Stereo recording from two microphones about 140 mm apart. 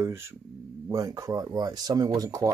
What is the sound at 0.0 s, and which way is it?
Speech, 20° right (ahead or behind).